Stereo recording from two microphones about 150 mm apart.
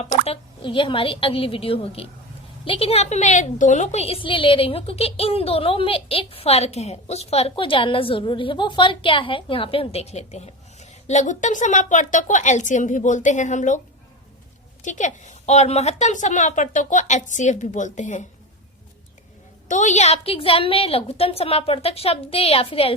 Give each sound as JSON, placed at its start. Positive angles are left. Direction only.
{"t": 0.3, "sound": "a woman's voice", "side_deg": 35}
{"t": 19.6, "sound": "a woman's voice", "side_deg": 55}